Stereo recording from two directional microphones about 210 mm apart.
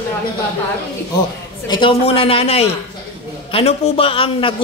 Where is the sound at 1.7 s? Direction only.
25° left (ahead or behind).